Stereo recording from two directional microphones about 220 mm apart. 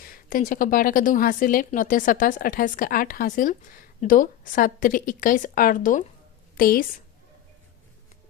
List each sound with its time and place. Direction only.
0.0 s a woman's voice: 40° left (ahead or behind)